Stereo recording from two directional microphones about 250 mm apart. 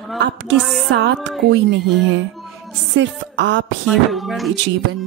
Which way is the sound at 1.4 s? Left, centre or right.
Right.